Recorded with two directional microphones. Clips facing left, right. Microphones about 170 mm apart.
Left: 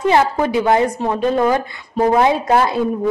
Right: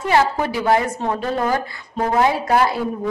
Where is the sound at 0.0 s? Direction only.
20° left (ahead or behind).